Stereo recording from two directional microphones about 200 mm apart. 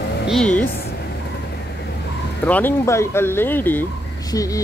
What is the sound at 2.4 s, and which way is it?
Speech, 10° left (ahead or behind).